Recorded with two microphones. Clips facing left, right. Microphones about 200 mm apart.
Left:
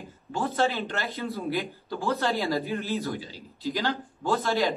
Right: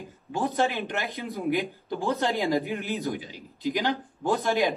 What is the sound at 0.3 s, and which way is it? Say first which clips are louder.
A man's voice: even; 15° right (ahead or behind).